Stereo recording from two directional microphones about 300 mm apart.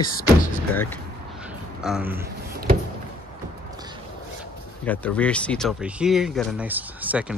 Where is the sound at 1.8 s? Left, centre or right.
Centre.